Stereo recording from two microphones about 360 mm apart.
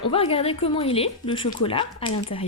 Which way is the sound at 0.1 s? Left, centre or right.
Centre.